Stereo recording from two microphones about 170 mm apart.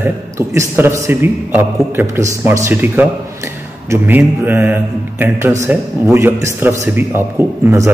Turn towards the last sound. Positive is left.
turn(degrees=-15)  # may be behind; listen again after turning